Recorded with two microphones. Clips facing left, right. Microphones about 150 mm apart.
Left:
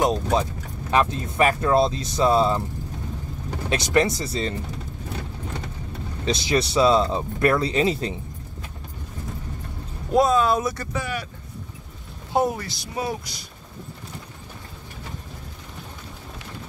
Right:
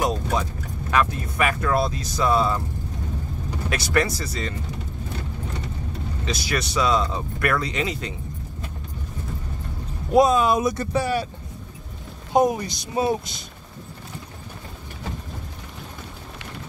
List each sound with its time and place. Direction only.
0.0 s speech: 25° left (ahead or behind)
3.7 s speech: 25° left (ahead or behind)
6.2 s speech: 25° left (ahead or behind)
10.1 s speech: 15° right (ahead or behind)
11.0 s speech: 35° right (ahead or behind)
12.3 s speech: 15° right (ahead or behind)